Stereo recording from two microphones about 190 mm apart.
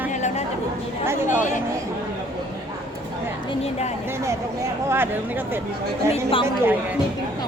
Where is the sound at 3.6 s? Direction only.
35° left (ahead or behind).